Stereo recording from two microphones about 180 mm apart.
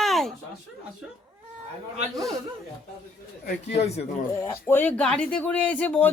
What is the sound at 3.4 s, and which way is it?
Speech, 35° left (ahead or behind).